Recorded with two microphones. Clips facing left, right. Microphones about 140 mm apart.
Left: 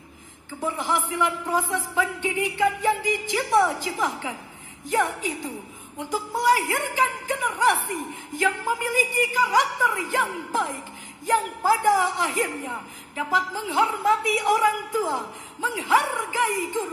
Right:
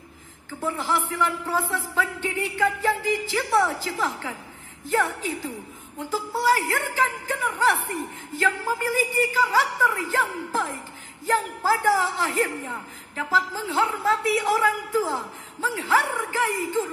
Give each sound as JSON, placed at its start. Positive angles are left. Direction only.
{"t": 0.6, "sound": "a man's voice", "side_deg": 15}